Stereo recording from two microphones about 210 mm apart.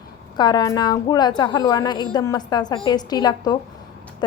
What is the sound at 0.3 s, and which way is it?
A woman's voice, 20° left (ahead or behind).